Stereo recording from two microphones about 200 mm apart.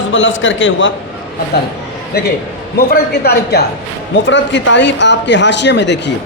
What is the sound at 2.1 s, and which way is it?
Speech, 50° left (ahead or behind).